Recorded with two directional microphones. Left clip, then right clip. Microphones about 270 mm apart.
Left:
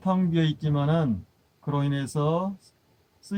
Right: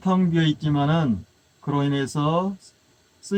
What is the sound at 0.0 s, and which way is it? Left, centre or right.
Speech, left.